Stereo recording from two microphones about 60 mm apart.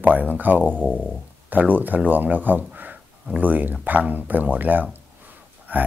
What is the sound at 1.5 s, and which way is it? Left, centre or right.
Speech, right.